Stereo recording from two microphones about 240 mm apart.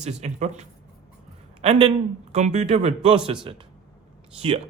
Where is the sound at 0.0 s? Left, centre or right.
Right.